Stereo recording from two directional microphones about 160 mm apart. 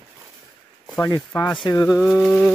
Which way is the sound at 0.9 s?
10° left (ahead or behind).